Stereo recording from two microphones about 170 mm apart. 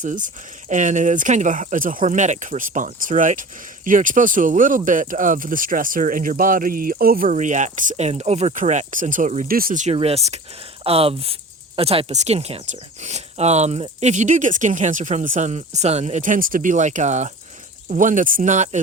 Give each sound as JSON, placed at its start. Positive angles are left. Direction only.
{"t": 0.0, "sound": "speech", "side_deg": -50}